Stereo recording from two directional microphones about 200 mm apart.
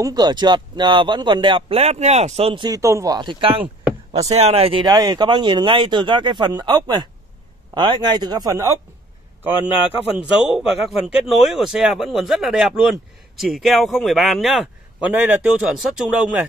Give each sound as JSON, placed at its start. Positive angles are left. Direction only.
{"t": 0.0, "sound": "speech", "side_deg": -20}
{"t": 10.1, "sound": "a man's voice", "side_deg": -5}